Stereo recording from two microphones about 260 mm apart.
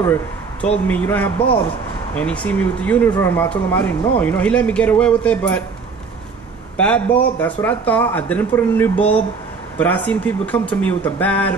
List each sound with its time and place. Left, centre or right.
0.0 s a man's voice: centre
6.8 s speech: centre